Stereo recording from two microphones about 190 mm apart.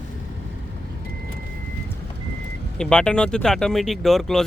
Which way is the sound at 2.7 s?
5° left (ahead or behind).